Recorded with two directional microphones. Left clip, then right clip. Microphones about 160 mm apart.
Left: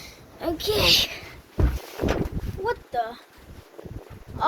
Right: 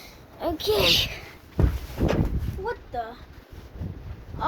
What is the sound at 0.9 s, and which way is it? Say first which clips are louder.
Speech: left 2 dB; 10° left (ahead or behind).